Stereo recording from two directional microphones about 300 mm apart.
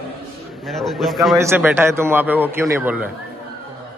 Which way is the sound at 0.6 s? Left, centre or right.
Centre.